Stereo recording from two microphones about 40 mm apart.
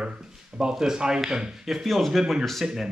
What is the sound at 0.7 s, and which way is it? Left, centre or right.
Speech, centre.